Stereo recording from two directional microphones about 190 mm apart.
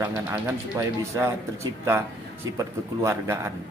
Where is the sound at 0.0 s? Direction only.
10° right (ahead or behind).